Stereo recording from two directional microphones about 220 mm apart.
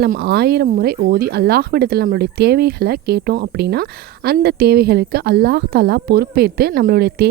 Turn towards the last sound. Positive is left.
turn(degrees=-45)  # may be behind; listen again after turning